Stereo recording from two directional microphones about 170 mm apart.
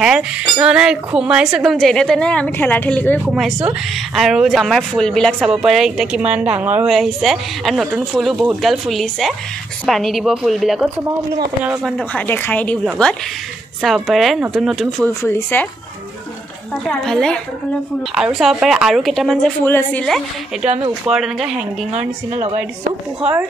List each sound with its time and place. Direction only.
0.0 s speech: 5° right (ahead or behind); by 3.2 s 10° left (ahead or behind)
3.3 s speech: 5° right (ahead or behind)
12.1 s a woman's voice: 10° left (ahead or behind)
15.2 s a woman's voice: 10° left (ahead or behind)
16.8 s speech: centre (ahead or behind)
21.1 s speech: centre (ahead or behind)
22.3 s a woman's voice: 40° right (ahead or behind)